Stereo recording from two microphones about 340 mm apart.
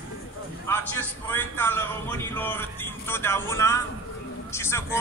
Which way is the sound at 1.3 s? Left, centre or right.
Centre.